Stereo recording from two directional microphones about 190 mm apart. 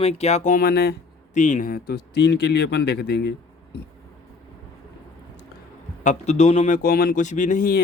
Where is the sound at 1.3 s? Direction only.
40° left (ahead or behind); by 3.3 s 60° left (ahead or behind).